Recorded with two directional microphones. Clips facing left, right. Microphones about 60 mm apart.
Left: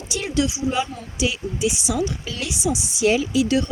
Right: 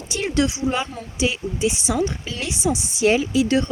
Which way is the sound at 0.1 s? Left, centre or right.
Right.